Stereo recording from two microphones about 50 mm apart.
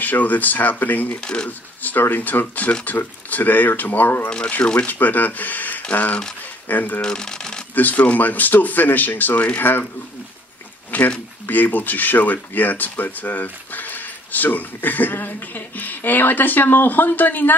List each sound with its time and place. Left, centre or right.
0.0 s speech: left
1.2 s speech: centre
1.8 s speech: left
7.0 s shuffling cards: centre
7.7 s speech: left
10.9 s speech: left